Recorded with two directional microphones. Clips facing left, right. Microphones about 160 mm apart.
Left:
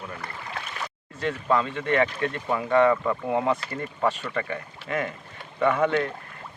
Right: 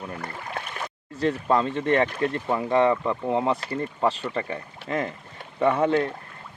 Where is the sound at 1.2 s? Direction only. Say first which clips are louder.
Right 2 dB; 35° right (ahead or behind).